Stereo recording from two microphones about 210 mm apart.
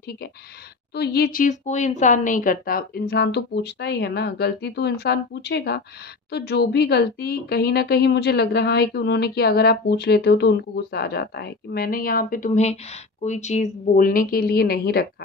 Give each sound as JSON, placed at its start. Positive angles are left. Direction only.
{"t": 0.9, "sound": "a woman's voice", "side_deg": 50}